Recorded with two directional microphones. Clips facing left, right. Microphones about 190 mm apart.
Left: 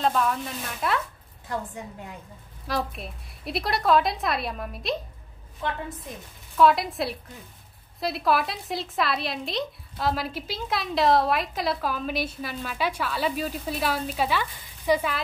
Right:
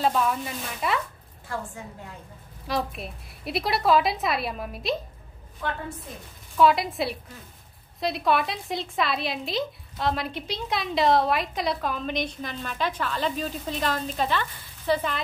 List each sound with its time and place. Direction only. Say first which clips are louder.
0.0 s a woman's voice: even; 5° right (ahead or behind)
1.5 s a woman's voice: left 2 dB; 20° left (ahead or behind)
2.6 s a woman's voice: right 1 dB; centre (ahead or behind)
5.6 s a woman's voice: left 1 dB; 20° left (ahead or behind)
6.5 s a woman's voice: even; centre (ahead or behind)